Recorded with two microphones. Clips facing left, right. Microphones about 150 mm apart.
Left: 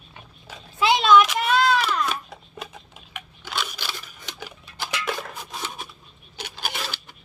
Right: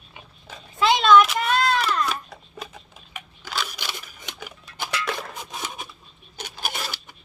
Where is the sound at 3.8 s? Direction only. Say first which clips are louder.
Even; 20° right (ahead or behind).